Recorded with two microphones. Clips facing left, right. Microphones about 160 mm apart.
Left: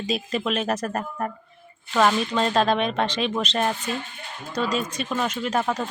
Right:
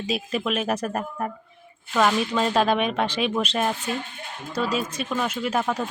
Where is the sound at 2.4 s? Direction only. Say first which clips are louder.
Even; 5° right (ahead or behind).